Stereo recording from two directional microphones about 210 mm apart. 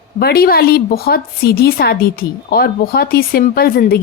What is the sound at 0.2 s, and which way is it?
A woman's voice, 45° left (ahead or behind).